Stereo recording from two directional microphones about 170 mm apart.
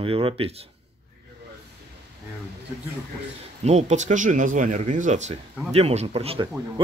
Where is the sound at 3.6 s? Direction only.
40° right (ahead or behind).